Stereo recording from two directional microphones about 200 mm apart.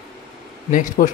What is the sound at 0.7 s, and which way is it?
Speech, 40° left (ahead or behind).